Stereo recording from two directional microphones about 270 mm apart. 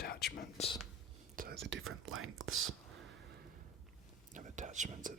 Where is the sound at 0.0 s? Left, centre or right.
Left.